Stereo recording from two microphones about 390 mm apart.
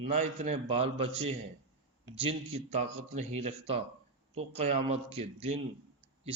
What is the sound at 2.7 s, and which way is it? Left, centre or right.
Speech, centre.